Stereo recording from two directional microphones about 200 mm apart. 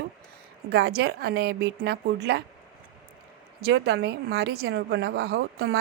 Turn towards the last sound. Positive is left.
turn(degrees=-55)  # may be behind; listen again after turning